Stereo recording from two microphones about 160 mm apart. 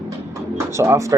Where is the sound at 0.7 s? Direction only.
15° right (ahead or behind).